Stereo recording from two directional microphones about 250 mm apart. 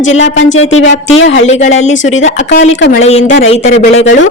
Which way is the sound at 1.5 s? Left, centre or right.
Left.